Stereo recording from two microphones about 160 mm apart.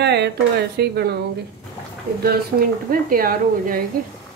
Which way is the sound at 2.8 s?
65° right (ahead or behind).